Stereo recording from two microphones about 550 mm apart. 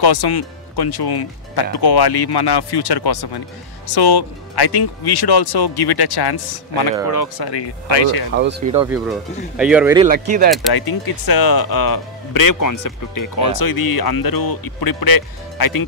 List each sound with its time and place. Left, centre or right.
0.0 s speech: left
8.4 s speech: centre
10.7 s speech: left